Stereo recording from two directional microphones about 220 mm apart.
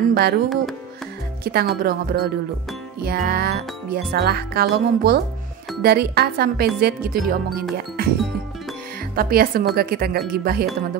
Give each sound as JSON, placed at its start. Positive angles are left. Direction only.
{"t": 0.1, "sound": "speech", "side_deg": -45}
{"t": 1.4, "sound": "speech", "side_deg": -45}